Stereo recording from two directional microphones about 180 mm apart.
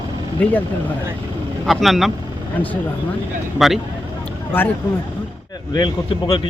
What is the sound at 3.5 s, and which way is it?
Speech, centre (ahead or behind).